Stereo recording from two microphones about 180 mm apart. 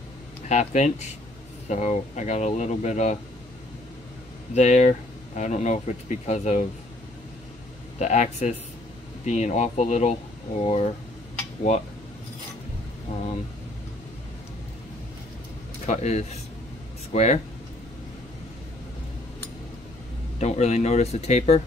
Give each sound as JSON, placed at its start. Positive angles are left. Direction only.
{"t": 0.5, "sound": "speech", "side_deg": 40}
{"t": 4.6, "sound": "speech", "side_deg": 40}
{"t": 8.0, "sound": "speech", "side_deg": 40}
{"t": 15.8, "sound": "speech", "side_deg": 40}
{"t": 20.3, "sound": "speech", "side_deg": 40}